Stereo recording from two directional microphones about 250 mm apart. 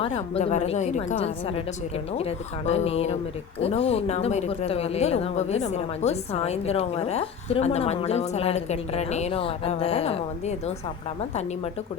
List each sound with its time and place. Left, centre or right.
0.0 s speech: left